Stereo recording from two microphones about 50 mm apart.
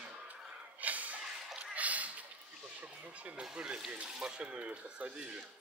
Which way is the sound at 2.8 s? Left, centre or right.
Right.